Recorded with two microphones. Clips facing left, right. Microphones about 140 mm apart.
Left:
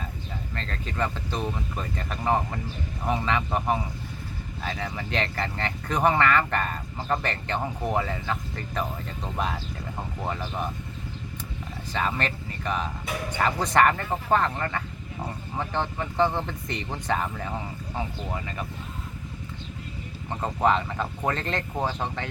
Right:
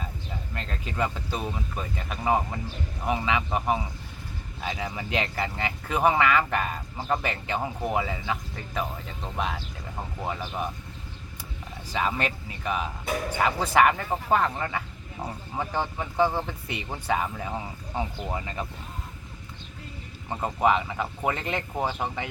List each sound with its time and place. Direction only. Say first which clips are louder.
0.5 s speech: even; 10° right (ahead or behind)
11.9 s speech: right 1 dB; 10° right (ahead or behind)
17.9 s speech: right 2 dB; 20° right (ahead or behind)
20.3 s speech: even; 5° right (ahead or behind)